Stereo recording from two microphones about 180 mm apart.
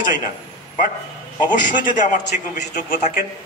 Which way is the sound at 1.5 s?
45° left (ahead or behind).